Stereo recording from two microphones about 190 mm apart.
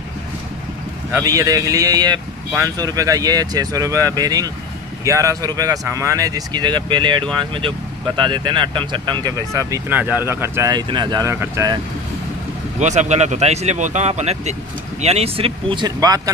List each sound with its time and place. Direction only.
1.1 s speech: 15° right (ahead or behind)
12.7 s speech: 40° right (ahead or behind); by 16.2 s 20° right (ahead or behind)